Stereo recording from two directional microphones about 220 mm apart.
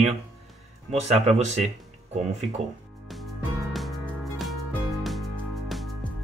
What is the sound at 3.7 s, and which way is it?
Music, centre (ahead or behind).